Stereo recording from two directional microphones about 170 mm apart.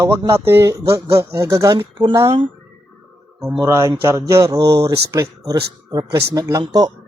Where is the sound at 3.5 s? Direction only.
15° right (ahead or behind).